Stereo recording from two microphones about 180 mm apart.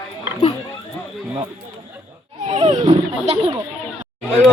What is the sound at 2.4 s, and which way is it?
Speech, 30° right (ahead or behind).